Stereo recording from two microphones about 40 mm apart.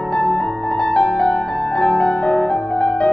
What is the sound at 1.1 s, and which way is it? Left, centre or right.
Music, left.